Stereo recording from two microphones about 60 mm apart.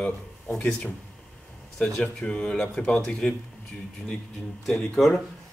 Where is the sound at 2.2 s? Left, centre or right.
Centre.